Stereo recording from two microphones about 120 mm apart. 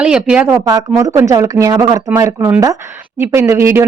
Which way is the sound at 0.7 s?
30° right (ahead or behind).